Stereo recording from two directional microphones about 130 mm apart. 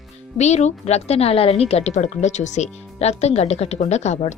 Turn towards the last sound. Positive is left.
turn(degrees=60)  # may be behind; listen again after turning